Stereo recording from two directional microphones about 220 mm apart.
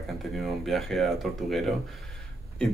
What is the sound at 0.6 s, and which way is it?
Speech, centre (ahead or behind).